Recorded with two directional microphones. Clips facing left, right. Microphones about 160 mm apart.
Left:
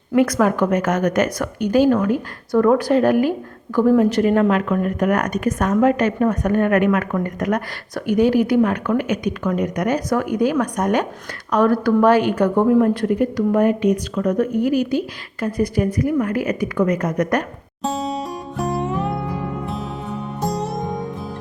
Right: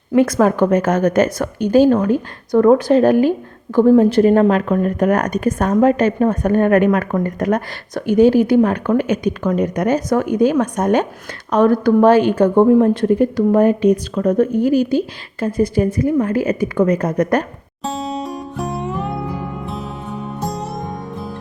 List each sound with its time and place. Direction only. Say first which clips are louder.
0.1 s a woman's voice: right 3 dB; 25° right (ahead or behind)
17.8 s music: even; centre (ahead or behind)
20.4 s music: left 3 dB; centre (ahead or behind)